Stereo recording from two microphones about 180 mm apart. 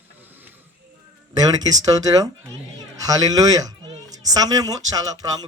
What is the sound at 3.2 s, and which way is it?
Speech, 20° right (ahead or behind).